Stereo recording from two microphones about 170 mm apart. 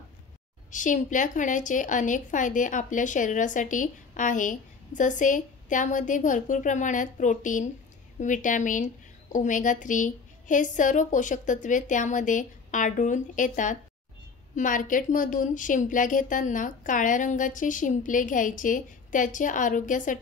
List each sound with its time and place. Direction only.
0.7 s a woman's voice: 50° left (ahead or behind)